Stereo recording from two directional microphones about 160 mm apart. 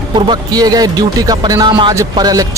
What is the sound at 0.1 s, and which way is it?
A man's voice, 25° right (ahead or behind).